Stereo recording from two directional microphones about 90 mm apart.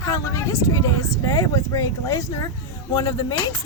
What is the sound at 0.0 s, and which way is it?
Speech, 35° left (ahead or behind).